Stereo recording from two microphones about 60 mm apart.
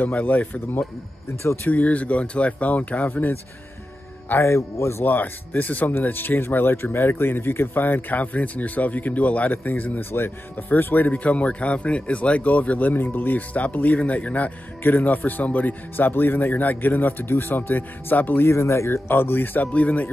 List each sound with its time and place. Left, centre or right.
0.0 s speech: left
1.4 s speech: left
1.7 s speech: left
4.4 s speech: left
5.0 s speech: left
11.2 s speech: left
18.5 s speech: left